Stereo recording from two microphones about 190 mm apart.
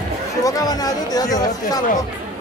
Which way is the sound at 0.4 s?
20° left (ahead or behind).